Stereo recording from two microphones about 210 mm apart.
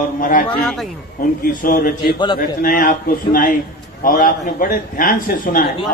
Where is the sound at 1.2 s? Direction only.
45° left (ahead or behind).